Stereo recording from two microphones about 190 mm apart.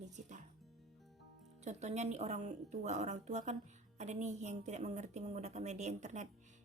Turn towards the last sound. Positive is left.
turn(degrees=-40)  # may be behind; listen again after turning